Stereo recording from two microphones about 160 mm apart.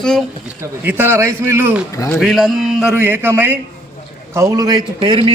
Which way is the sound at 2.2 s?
Centre (ahead or behind).